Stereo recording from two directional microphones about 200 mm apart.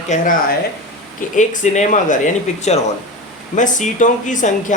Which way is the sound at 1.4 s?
35° left (ahead or behind).